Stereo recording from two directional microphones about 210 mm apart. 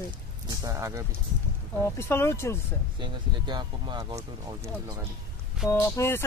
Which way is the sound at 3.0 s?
20° right (ahead or behind).